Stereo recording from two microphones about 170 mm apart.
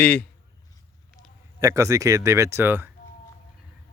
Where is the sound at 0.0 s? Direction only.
10° left (ahead or behind).